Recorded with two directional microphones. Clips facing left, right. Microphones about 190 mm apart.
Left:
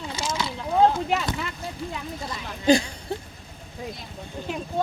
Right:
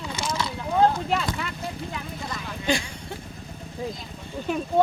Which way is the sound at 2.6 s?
35° left (ahead or behind).